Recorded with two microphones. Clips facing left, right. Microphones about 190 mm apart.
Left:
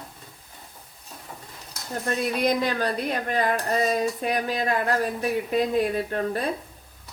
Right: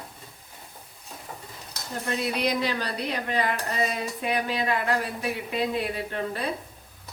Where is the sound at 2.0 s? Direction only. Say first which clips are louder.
Left 3 dB; 50° left (ahead or behind).